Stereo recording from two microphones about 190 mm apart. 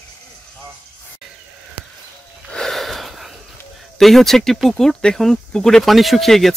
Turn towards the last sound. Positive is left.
turn(degrees=0)  # may be behind; listen again after turning